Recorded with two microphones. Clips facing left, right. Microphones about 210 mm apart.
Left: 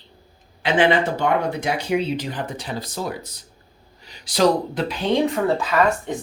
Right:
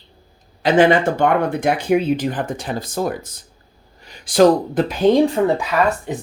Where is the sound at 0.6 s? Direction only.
40° right (ahead or behind).